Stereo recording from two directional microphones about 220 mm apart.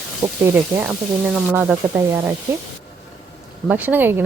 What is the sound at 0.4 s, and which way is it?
Speech, 5° right (ahead or behind).